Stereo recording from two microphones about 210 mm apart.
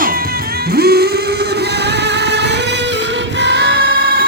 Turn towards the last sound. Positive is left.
turn(degrees=-55)  # may be behind; listen again after turning